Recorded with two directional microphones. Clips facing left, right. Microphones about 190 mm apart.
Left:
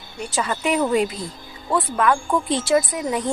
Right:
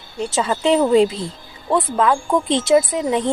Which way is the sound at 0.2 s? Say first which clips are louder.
Right 5 dB; 25° right (ahead or behind).